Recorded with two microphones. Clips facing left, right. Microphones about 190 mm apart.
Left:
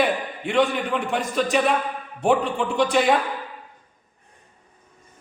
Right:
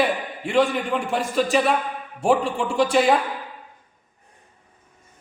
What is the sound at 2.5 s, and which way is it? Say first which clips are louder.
Speech: right 1 dB; centre (ahead or behind).